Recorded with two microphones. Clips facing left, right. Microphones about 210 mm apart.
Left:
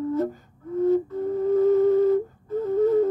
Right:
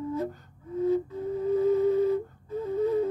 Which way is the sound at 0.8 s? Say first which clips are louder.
Left 5 dB; 55° left (ahead or behind).